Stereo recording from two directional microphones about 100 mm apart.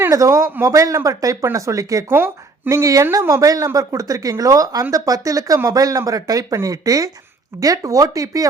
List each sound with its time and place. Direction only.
0.1 s a woman's voice: 30° right (ahead or behind)
2.0 s a woman's voice: 20° right (ahead or behind)